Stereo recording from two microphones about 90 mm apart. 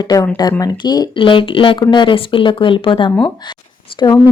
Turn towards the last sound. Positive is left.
turn(degrees=45)  # may be behind; listen again after turning